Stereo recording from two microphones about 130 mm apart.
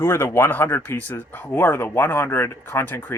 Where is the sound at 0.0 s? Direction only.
20° left (ahead or behind).